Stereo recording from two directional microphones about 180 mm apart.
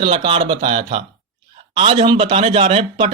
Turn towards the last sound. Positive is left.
turn(degrees=-30)  # may be behind; listen again after turning